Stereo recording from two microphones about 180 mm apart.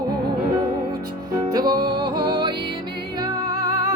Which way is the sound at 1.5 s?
20° right (ahead or behind).